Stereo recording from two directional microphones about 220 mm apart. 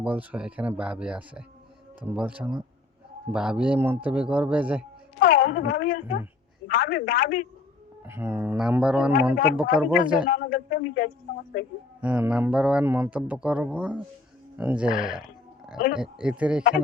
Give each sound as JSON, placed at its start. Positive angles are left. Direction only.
{"t": 0.0, "sound": "speech", "side_deg": -5}
{"t": 5.2, "sound": "a sound", "side_deg": 45}
{"t": 5.5, "sound": "a woman's voice", "side_deg": 45}
{"t": 8.0, "sound": "speech", "side_deg": -10}
{"t": 10.2, "sound": "a man's voice", "side_deg": 40}
{"t": 11.9, "sound": "speech", "side_deg": -5}